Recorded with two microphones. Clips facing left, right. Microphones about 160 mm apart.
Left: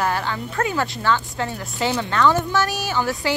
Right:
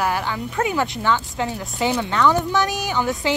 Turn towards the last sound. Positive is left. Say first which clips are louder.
# right 1 dB
turn(degrees=-20)  # may be behind; listen again after turning